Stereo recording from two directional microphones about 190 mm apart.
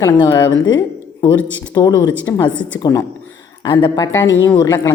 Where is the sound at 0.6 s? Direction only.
20° left (ahead or behind).